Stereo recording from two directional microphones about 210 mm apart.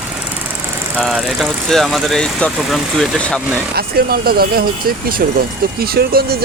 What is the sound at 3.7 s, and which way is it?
Speech, 45° right (ahead or behind).